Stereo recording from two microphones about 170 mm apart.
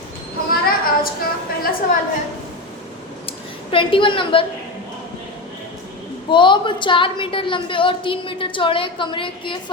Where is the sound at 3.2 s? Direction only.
30° left (ahead or behind).